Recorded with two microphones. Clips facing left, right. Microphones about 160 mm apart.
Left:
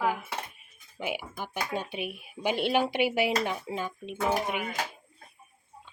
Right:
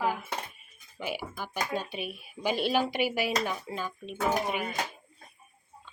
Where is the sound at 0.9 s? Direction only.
15° left (ahead or behind).